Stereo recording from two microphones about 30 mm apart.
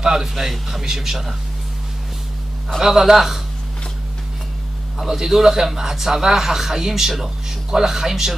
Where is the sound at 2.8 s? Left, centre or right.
Centre.